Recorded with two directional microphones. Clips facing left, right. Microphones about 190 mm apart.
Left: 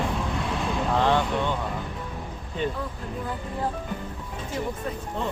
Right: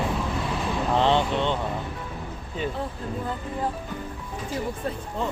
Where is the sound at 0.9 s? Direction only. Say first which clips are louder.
Right 2 dB; 20° right (ahead or behind).